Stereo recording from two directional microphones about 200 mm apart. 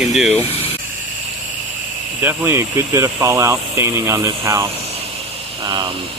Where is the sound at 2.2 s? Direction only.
10° right (ahead or behind).